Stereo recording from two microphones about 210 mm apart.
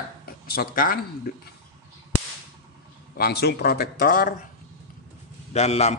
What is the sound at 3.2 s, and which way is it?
Speech, 50° left (ahead or behind).